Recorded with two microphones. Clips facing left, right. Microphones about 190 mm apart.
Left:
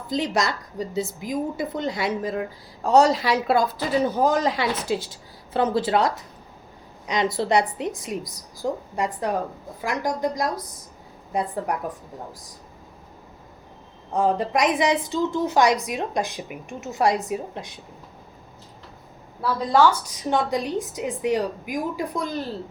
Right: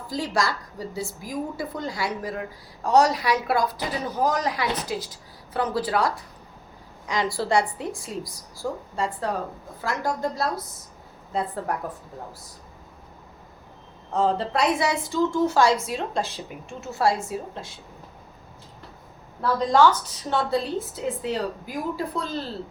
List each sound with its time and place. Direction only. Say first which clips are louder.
0.1 s a woman's voice: left 2 dB; 20° left (ahead or behind)
14.1 s a woman's voice: left 1 dB; 15° left (ahead or behind)
19.4 s a woman's voice: even; 10° left (ahead or behind)